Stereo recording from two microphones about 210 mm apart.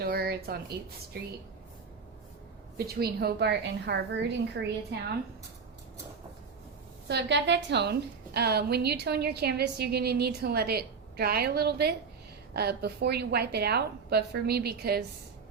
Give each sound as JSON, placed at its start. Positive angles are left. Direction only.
{"t": 0.0, "sound": "a woman's voice", "side_deg": -45}
{"t": 2.7, "sound": "a woman's voice", "side_deg": -50}
{"t": 7.1, "sound": "a woman's voice", "side_deg": -55}